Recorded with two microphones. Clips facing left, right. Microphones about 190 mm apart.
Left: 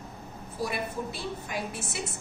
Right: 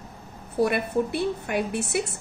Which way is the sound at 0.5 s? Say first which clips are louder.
Right 10 dB; 60° right (ahead or behind).